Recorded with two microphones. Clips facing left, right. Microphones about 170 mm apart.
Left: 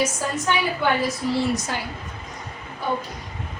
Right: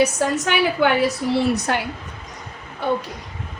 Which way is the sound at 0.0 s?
75° right (ahead or behind).